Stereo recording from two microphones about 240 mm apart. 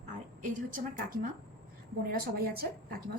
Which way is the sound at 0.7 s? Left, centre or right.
Right.